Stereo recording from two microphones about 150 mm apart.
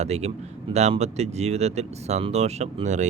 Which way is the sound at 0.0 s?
45° right (ahead or behind).